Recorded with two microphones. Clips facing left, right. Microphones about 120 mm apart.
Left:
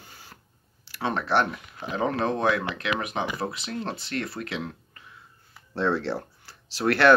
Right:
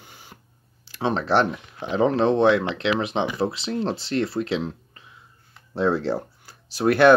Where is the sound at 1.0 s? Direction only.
25° right (ahead or behind).